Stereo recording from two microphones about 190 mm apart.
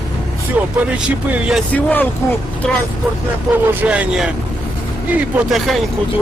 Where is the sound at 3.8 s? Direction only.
5° right (ahead or behind).